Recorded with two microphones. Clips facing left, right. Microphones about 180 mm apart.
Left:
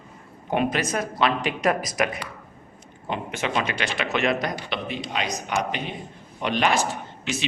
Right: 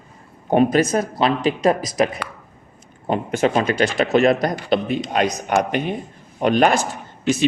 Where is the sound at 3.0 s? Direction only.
40° right (ahead or behind).